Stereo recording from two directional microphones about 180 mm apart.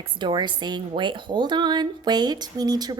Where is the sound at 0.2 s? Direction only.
25° right (ahead or behind).